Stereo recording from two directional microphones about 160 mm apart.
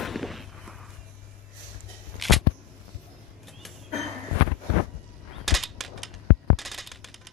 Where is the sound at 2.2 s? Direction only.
Centre (ahead or behind).